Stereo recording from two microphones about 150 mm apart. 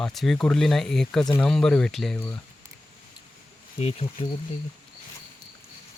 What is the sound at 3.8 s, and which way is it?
Speech, 45° left (ahead or behind).